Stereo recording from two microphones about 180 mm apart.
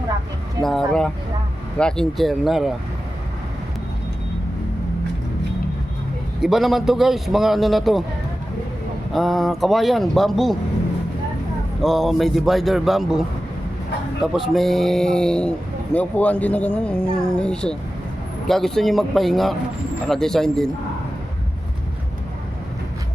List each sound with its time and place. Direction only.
0.6 s a man's voice: centre (ahead or behind)
6.4 s a man's voice: centre (ahead or behind)
9.1 s a man's voice: centre (ahead or behind)
11.8 s a man's voice: centre (ahead or behind)